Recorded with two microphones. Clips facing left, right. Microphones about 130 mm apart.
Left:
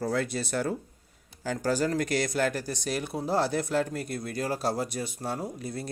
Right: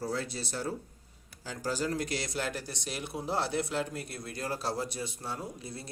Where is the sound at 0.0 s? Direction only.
55° left (ahead or behind).